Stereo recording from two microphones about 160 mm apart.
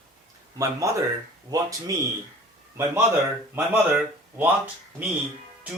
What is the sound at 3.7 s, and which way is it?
Speech, 10° right (ahead or behind).